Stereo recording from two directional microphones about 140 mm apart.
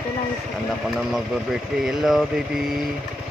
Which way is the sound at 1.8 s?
5° right (ahead or behind).